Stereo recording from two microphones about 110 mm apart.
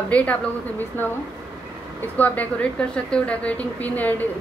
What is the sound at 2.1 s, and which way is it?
A woman's voice, 15° left (ahead or behind).